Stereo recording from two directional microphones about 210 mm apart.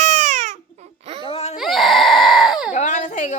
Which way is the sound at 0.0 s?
35° right (ahead or behind).